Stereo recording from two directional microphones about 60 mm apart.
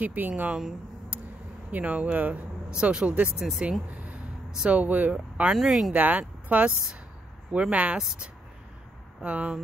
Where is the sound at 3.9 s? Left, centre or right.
Right.